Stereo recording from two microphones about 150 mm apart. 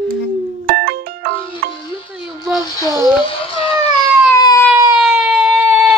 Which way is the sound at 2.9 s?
25° right (ahead or behind).